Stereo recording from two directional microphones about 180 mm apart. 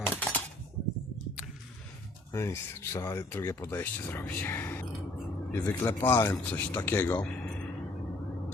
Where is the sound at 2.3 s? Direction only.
15° left (ahead or behind).